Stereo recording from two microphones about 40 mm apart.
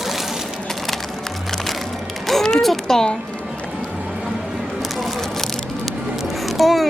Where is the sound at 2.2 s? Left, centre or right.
Centre.